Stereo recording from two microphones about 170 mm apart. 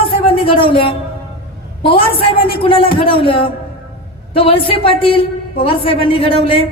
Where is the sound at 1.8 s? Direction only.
30° left (ahead or behind).